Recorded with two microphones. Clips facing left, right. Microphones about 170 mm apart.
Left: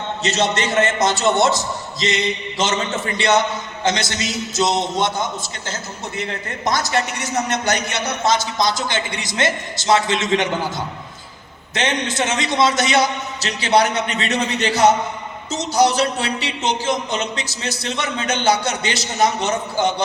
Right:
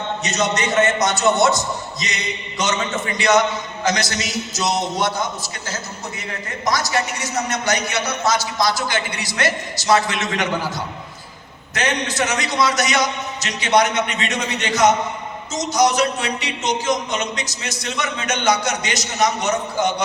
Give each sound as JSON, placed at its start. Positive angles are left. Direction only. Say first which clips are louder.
{"t": 0.2, "sound": "a man's voice", "louder": "left 3 dB", "side_deg": 30}
{"t": 3.2, "sound": "a man's voice", "louder": "right 1 dB", "side_deg": 30}
{"t": 6.7, "sound": "speech", "louder": "left 1 dB", "side_deg": 55}
{"t": 7.9, "sound": "a man's voice", "louder": "left 1 dB", "side_deg": 25}
{"t": 11.7, "sound": "a man's voice", "louder": "left 1 dB", "side_deg": 25}